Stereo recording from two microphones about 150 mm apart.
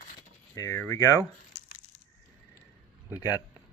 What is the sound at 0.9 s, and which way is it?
Speech, 25° left (ahead or behind).